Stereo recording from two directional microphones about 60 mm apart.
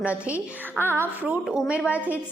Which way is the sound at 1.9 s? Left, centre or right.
Right.